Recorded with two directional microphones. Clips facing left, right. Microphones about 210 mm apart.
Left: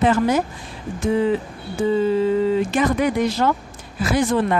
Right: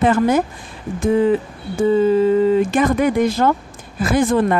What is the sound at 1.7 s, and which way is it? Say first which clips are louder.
Speech: right 4 dB; 45° right (ahead or behind).